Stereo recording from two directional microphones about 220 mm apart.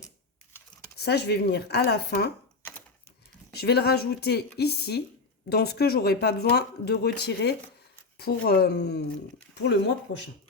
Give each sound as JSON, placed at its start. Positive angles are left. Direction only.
{"t": 0.9, "sound": "speech", "side_deg": 45}
{"t": 3.5, "sound": "speech", "side_deg": 45}